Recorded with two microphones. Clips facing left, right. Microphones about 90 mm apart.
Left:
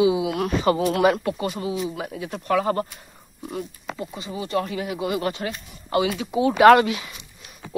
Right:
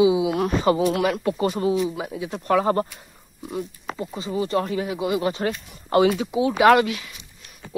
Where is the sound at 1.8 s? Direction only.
15° right (ahead or behind).